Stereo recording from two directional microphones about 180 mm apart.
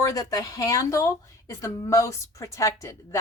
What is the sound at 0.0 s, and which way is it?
A woman's voice, 20° left (ahead or behind).